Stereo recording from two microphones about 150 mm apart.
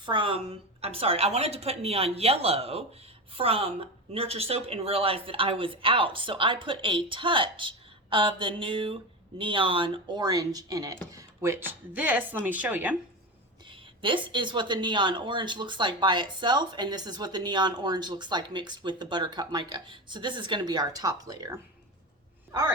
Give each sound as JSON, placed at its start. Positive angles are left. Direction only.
{"t": 0.0, "sound": "a woman's voice", "side_deg": -35}
{"t": 13.7, "sound": "speech", "side_deg": -35}